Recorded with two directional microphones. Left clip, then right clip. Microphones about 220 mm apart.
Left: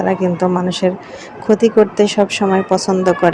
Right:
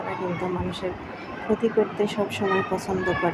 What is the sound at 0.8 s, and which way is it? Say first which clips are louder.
Speech: left 13 dB; 35° left (ahead or behind).